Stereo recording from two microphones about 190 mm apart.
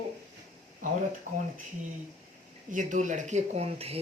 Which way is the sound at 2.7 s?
40° right (ahead or behind).